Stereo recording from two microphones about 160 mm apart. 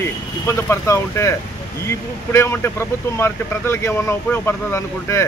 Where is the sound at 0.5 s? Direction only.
15° left (ahead or behind).